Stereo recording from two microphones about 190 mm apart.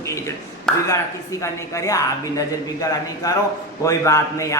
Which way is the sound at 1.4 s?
15° left (ahead or behind).